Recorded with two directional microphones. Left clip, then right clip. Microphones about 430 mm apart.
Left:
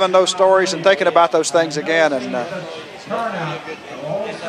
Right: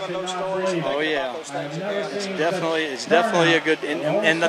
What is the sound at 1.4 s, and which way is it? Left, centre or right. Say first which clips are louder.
Speech: left 12 dB; left.